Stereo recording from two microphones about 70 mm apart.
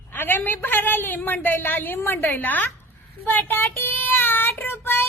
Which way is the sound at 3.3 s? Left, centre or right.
Left.